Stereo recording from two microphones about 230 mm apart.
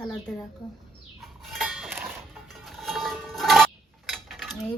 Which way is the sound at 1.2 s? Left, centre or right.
Centre.